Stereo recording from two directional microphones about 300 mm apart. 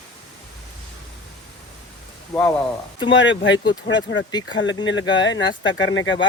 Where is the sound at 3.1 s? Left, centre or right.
Left.